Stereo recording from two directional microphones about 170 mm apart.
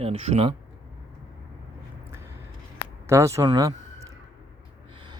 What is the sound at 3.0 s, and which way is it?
A man's voice, 15° right (ahead or behind).